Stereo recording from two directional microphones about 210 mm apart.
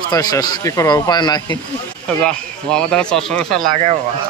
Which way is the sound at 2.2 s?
5° left (ahead or behind).